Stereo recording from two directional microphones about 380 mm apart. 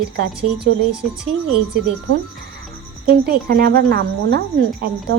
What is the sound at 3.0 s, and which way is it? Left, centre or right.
Speech, right.